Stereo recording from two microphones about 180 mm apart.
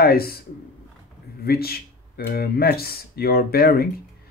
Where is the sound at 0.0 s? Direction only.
60° left (ahead or behind).